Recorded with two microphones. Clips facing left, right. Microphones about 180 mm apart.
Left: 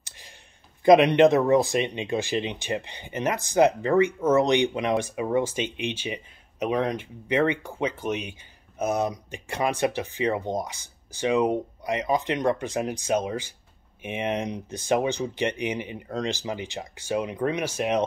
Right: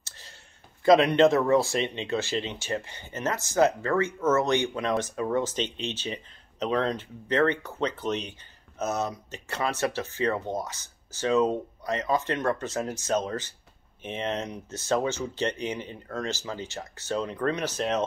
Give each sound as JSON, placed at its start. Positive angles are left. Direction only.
{"t": 0.8, "sound": "speech", "side_deg": 15}